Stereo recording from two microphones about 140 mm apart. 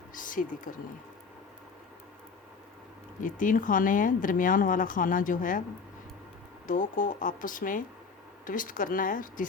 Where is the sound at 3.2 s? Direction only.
70° left (ahead or behind).